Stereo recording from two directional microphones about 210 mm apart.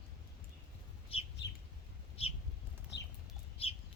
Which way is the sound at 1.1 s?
25° left (ahead or behind).